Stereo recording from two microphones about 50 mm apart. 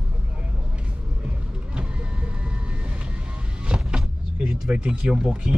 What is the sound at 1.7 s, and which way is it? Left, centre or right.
Vehicle, right.